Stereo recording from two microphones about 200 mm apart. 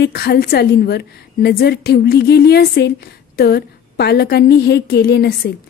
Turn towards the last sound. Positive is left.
turn(degrees=55)  # may be behind; listen again after turning